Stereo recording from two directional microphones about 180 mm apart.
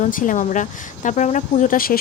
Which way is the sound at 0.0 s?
45° left (ahead or behind).